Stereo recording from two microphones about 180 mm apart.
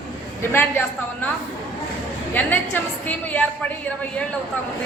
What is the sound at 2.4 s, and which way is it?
A woman's voice, 10° left (ahead or behind).